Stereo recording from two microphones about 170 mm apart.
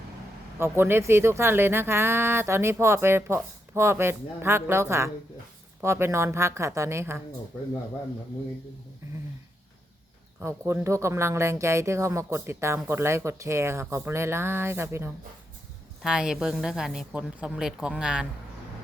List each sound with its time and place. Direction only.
0.6 s speech: 15° right (ahead or behind)
10.4 s speech: 15° right (ahead or behind)